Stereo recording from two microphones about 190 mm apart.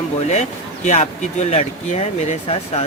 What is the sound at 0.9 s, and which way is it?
Speech, 35° left (ahead or behind).